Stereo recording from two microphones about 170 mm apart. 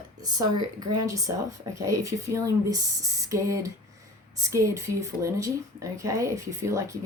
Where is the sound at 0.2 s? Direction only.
25° right (ahead or behind).